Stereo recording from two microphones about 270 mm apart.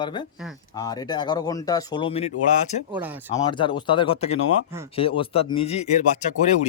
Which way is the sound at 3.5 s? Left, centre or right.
Centre.